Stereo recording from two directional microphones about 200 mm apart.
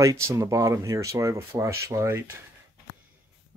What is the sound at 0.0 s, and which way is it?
Speech, 15° right (ahead or behind).